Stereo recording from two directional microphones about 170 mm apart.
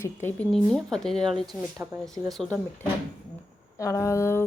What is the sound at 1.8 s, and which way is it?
Speech, 15° right (ahead or behind).